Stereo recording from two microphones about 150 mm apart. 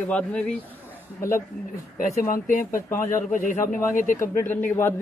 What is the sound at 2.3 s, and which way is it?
A man's voice, 60° left (ahead or behind).